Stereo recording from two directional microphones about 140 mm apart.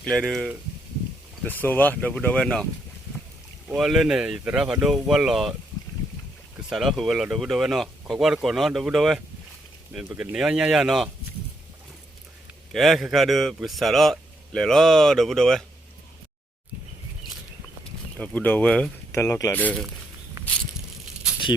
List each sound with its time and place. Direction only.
0.0 s speech: 5° left (ahead or behind)
1.5 s speech: 15° left (ahead or behind)
3.8 s speech: centre (ahead or behind)
6.7 s speech: centre (ahead or behind)
12.7 s speech: centre (ahead or behind)
18.2 s speech: 10° left (ahead or behind)
19.1 s speech: 20° left (ahead or behind)
20.4 s a sound: 20° right (ahead or behind)